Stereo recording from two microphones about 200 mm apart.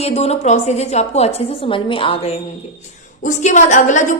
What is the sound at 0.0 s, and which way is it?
A woman's voice, 30° left (ahead or behind).